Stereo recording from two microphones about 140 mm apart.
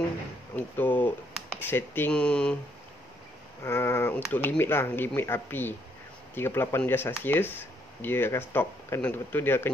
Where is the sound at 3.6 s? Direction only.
20° left (ahead or behind).